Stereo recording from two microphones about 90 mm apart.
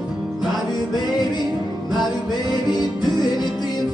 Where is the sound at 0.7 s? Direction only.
50° left (ahead or behind).